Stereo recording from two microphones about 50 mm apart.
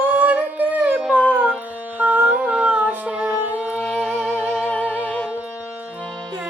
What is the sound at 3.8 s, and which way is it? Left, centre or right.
Music, left.